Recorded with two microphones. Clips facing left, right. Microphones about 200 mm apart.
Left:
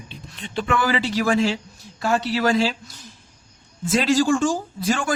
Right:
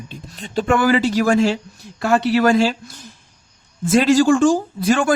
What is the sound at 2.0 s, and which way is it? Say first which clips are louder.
A man's voice: right 5 dB; 60° right (ahead or behind).